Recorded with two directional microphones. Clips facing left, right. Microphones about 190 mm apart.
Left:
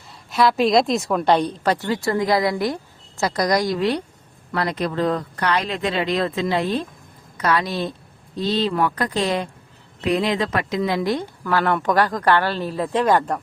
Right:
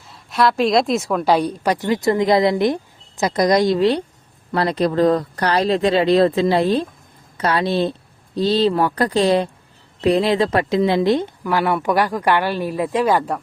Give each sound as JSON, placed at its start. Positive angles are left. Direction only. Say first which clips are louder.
{"t": 0.1, "sound": "a woman's voice", "louder": "right 1 dB", "side_deg": 0}
{"t": 11.4, "sound": "a woman's voice", "louder": "even", "side_deg": -10}